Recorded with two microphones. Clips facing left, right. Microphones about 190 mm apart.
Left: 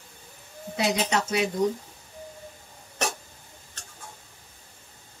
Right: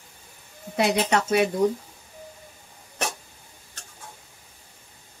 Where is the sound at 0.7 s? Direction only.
55° right (ahead or behind).